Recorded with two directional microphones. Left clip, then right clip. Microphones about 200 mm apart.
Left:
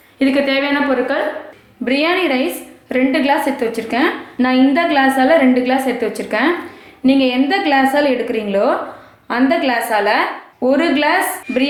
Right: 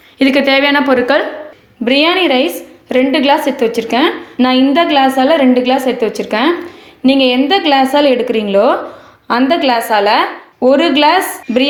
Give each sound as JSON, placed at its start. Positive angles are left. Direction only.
{"t": 0.2, "sound": "a woman's voice", "side_deg": -50}
{"t": 1.8, "sound": "a woman's voice", "side_deg": -35}